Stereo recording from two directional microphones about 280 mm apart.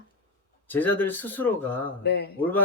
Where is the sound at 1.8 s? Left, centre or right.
Left.